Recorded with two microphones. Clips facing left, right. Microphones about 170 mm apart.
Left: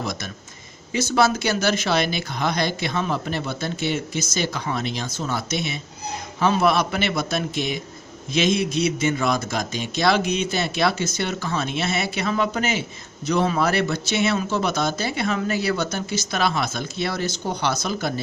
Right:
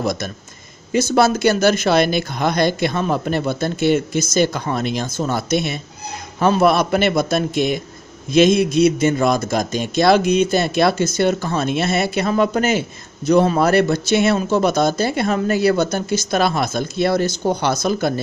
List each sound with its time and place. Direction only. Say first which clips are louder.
1.1 s speech: right 5 dB; 45° right (ahead or behind)